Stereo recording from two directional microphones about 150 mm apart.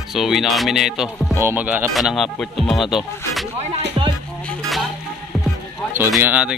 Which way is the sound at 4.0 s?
30° right (ahead or behind).